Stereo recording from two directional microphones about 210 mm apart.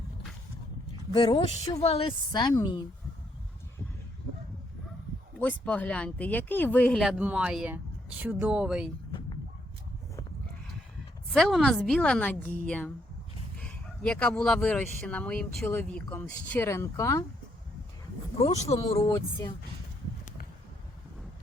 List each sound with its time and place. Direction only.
1.1 s a woman's voice: 20° left (ahead or behind)
5.4 s speech: 5° left (ahead or behind)
11.3 s speech: centre (ahead or behind)
18.3 s a woman's voice: 30° left (ahead or behind)